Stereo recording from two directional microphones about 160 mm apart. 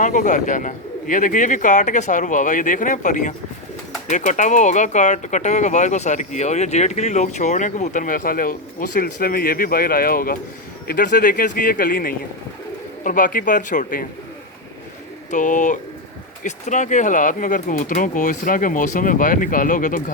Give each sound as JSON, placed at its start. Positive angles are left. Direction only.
{"t": 0.0, "sound": "speech", "side_deg": 50}
{"t": 15.3, "sound": "speech", "side_deg": 50}